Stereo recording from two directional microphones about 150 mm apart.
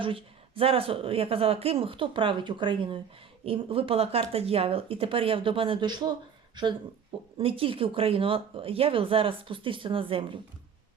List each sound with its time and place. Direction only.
0.0 s speech: 35° right (ahead or behind)
7.3 s speech: 35° right (ahead or behind)